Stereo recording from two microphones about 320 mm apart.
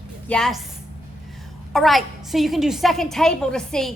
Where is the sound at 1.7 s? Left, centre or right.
Centre.